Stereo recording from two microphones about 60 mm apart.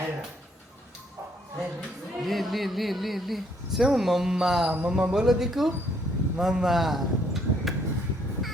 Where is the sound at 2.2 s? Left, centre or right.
Centre.